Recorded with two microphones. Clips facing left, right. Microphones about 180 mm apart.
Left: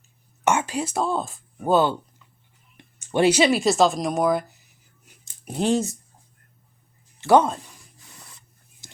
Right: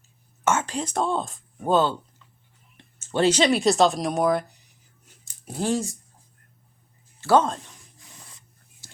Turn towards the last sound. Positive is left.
turn(degrees=5)  # may be behind; listen again after turning